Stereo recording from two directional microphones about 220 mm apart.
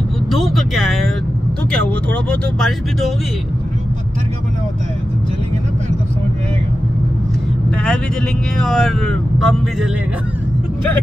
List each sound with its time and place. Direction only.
0.3 s vehicle: centre (ahead or behind)
1.7 s speech: 5° left (ahead or behind)
7.7 s vehicle: 5° left (ahead or behind)
8.5 s speech: centre (ahead or behind)